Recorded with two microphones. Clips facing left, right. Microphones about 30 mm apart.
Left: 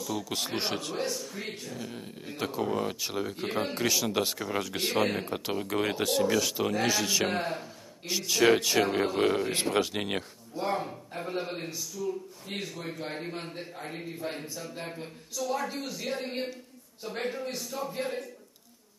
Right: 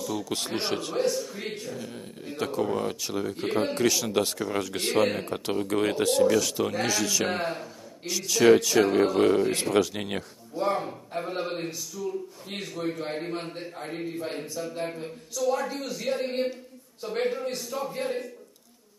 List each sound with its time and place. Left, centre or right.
0.0 s speech: centre
6.9 s speech: centre
7.2 s speech: centre
8.0 s a man's voice: centre
9.5 s speech: centre
10.5 s a man's voice: centre